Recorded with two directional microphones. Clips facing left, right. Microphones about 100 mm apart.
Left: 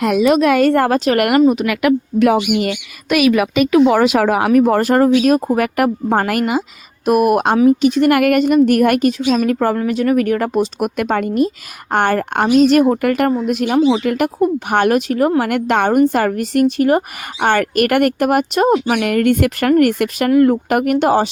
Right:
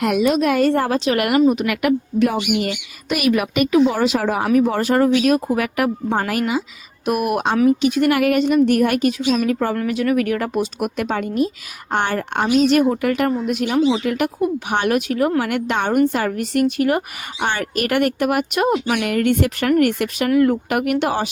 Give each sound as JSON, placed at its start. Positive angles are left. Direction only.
{"t": 0.3, "sound": "a woman's voice", "side_deg": 90}
{"t": 1.5, "sound": "speech", "side_deg": 90}
{"t": 4.5, "sound": "a woman's voice", "side_deg": 50}
{"t": 7.0, "sound": "a woman's voice", "side_deg": 45}
{"t": 8.1, "sound": "a woman's voice", "side_deg": 55}
{"t": 10.8, "sound": "a woman's voice", "side_deg": 45}
{"t": 17.4, "sound": "a woman's voice", "side_deg": 50}
{"t": 19.0, "sound": "a woman's voice", "side_deg": 50}